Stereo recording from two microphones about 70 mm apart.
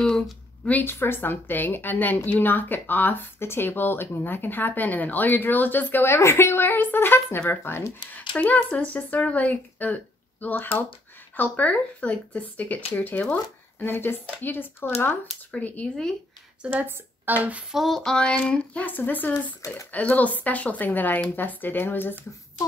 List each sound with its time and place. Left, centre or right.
0.7 s a woman's voice: left
8.5 s a woman's voice: centre
15.5 s a woman's voice: left
16.8 s speech: right
17.6 s a woman's voice: centre; by 22.1 s left